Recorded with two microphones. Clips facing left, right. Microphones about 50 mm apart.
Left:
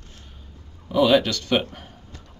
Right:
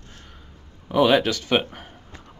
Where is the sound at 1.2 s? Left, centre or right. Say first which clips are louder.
Right 1 dB; centre.